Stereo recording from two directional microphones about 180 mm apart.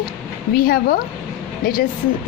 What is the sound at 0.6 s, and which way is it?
Speech, 55° left (ahead or behind).